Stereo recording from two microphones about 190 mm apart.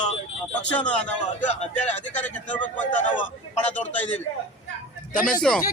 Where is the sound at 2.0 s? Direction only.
10° left (ahead or behind).